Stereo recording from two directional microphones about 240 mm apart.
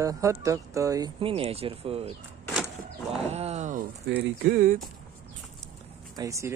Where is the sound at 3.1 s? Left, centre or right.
Right.